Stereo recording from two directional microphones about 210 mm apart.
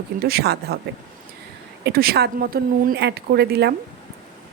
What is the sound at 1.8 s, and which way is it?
Speech, 45° right (ahead or behind).